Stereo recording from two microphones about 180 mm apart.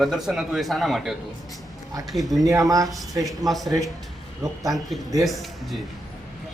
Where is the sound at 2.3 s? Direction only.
20° right (ahead or behind).